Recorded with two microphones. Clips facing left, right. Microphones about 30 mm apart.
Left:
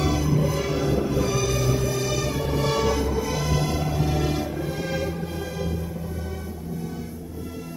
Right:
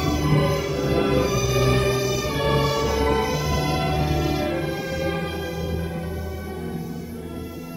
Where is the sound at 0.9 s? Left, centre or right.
Right.